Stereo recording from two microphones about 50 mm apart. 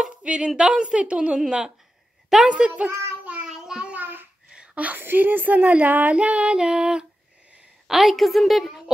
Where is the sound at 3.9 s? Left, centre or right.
Right.